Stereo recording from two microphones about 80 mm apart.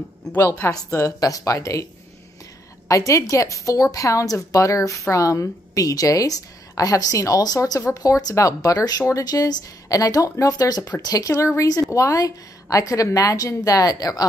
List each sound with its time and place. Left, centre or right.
0.5 s speech: left
2.9 s a woman's voice: left